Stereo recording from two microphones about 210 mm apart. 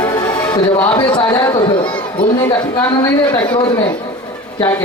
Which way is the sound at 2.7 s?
10° left (ahead or behind).